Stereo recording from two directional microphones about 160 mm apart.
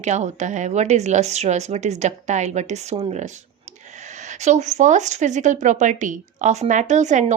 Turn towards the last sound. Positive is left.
turn(degrees=-50)  # may be behind; listen again after turning